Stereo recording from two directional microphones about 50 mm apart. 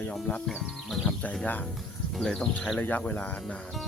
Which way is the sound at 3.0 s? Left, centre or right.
Left.